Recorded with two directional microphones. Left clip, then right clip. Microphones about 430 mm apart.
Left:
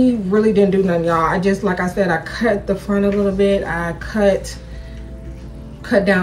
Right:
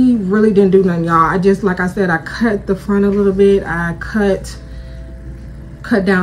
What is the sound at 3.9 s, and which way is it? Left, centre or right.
Speech, centre.